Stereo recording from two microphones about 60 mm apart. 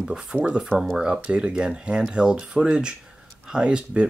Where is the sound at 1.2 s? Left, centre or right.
Centre.